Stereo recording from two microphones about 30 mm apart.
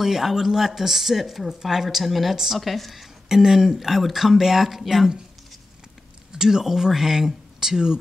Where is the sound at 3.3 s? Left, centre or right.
Centre.